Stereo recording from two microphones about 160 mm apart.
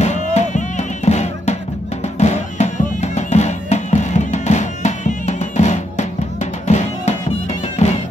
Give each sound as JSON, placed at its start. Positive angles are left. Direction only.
{"t": 0.0, "sound": "music", "side_deg": 45}